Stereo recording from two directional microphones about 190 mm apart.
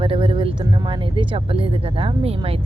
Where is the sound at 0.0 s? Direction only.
30° right (ahead or behind).